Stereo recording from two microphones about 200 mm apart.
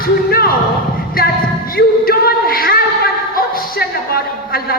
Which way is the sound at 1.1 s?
50° left (ahead or behind).